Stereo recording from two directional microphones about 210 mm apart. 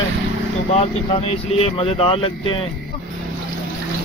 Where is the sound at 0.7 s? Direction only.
30° left (ahead or behind).